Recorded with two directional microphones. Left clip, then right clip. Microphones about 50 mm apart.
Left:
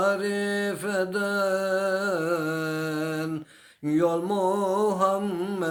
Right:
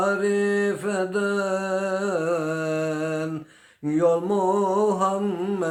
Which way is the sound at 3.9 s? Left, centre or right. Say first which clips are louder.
Right 3 dB; right.